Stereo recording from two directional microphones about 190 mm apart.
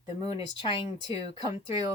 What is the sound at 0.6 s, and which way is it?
Speech, 25° left (ahead or behind).